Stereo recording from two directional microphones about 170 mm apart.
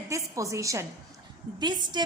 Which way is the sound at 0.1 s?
20° right (ahead or behind).